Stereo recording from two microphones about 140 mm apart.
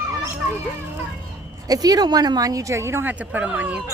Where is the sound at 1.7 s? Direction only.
25° right (ahead or behind).